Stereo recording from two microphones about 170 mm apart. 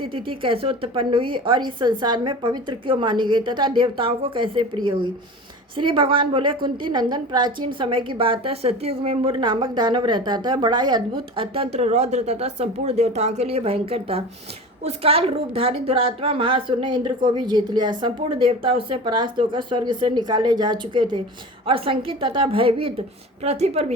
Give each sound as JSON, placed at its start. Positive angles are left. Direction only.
{"t": 0.0, "sound": "a woman's voice", "side_deg": -30}